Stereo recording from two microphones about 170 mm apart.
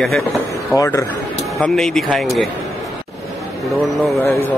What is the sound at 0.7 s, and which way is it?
Speech, 20° left (ahead or behind).